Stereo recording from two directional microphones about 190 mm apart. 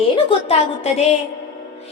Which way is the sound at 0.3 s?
30° left (ahead or behind).